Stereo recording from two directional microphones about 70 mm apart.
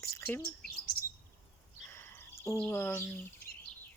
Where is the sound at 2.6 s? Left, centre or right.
Left.